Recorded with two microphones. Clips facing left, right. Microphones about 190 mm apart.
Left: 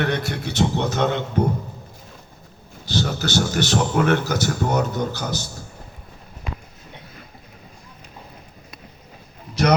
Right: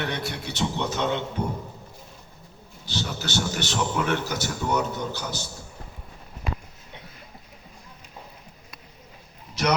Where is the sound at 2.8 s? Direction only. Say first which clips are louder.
Left 7 dB; 40° left (ahead or behind).